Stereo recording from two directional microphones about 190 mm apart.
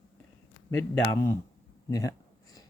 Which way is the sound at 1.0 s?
15° left (ahead or behind).